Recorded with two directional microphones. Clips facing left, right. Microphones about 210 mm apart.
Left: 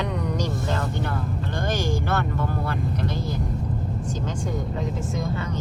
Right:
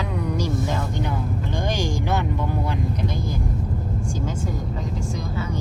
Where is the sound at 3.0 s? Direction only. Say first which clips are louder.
Right 1 dB; 10° right (ahead or behind).